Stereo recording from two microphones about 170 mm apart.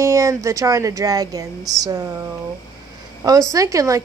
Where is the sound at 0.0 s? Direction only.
20° right (ahead or behind).